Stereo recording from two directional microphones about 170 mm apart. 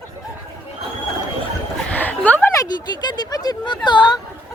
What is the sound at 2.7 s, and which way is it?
Speech, 25° left (ahead or behind).